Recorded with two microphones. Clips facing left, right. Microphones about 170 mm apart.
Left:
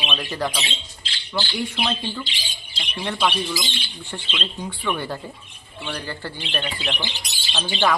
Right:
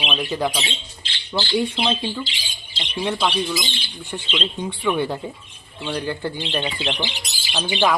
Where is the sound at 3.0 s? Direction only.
15° right (ahead or behind).